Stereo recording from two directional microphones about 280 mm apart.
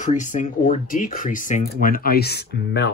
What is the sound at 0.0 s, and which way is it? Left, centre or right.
Speech, left.